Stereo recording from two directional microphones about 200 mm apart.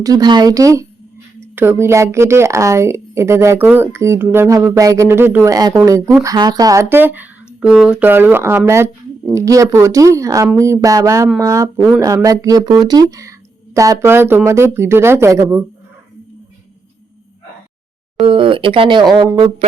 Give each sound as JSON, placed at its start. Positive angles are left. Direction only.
{"t": 0.0, "sound": "speech", "side_deg": -20}
{"t": 18.2, "sound": "speech", "side_deg": -25}